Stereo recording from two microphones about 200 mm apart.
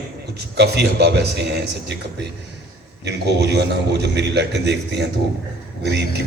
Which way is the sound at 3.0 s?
55° right (ahead or behind).